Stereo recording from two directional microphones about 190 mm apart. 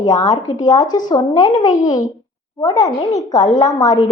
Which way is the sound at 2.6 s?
20° left (ahead or behind).